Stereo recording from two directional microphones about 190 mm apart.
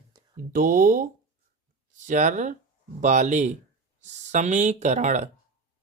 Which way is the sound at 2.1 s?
40° right (ahead or behind).